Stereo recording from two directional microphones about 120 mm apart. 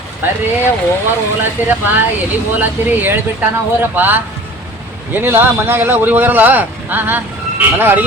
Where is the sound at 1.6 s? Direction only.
15° right (ahead or behind).